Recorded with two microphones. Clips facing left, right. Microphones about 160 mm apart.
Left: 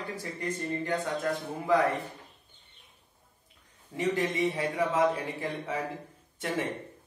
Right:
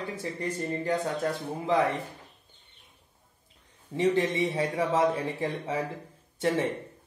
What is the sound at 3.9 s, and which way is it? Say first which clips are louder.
Speech: right 4 dB; 20° right (ahead or behind).